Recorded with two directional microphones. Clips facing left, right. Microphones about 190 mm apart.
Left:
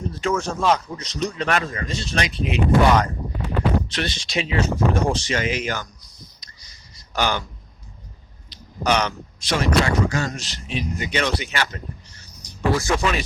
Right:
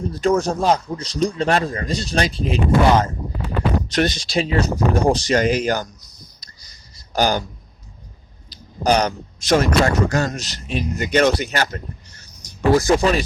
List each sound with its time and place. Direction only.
0.1 s speech: 35° right (ahead or behind)
3.9 s speech: 40° right (ahead or behind)
8.8 s speech: 35° right (ahead or behind)